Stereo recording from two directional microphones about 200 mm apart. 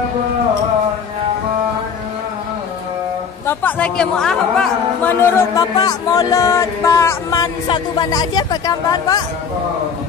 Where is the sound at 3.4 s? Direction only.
5° left (ahead or behind).